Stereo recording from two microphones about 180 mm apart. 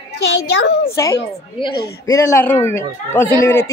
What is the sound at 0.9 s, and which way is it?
A woman's voice, 20° left (ahead or behind).